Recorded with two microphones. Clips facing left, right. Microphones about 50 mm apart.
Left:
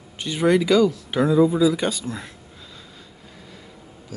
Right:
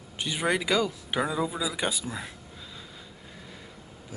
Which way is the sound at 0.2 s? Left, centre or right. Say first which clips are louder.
Left 8 dB; centre.